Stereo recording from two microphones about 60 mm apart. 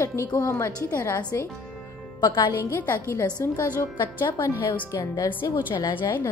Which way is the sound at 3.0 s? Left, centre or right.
Left.